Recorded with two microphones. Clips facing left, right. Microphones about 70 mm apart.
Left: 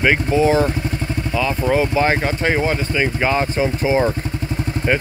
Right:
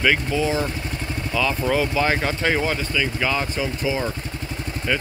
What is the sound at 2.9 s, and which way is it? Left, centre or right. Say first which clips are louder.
Speech: left 5 dB; left.